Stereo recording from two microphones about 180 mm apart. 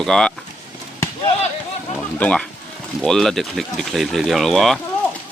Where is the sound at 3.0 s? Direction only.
Centre (ahead or behind).